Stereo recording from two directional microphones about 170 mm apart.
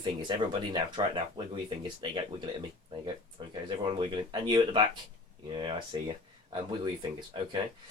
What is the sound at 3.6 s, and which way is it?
Speech, 30° right (ahead or behind).